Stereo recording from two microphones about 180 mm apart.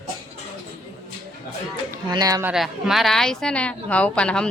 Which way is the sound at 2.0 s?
20° right (ahead or behind).